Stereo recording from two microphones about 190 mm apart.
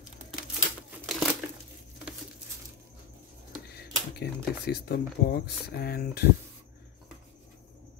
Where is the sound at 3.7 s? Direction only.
55° left (ahead or behind).